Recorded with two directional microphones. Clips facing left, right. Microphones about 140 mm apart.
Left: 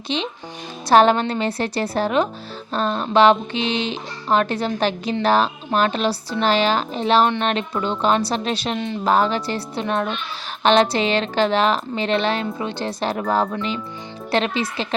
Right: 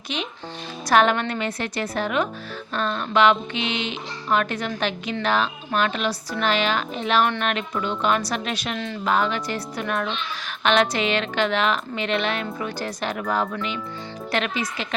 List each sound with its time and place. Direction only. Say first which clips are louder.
0.9 s speech: left 4 dB; 30° left (ahead or behind)
9.0 s speech: left 4 dB; 35° left (ahead or behind)